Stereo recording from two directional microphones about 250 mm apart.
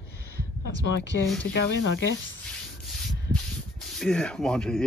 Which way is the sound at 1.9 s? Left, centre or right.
Left.